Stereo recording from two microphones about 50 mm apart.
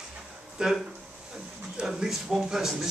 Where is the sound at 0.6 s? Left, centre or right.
Centre.